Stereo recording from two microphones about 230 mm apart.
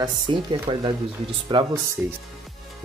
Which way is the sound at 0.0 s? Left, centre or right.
Centre.